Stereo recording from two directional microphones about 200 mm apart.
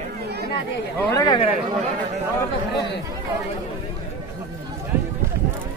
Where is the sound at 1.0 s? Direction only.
15° left (ahead or behind).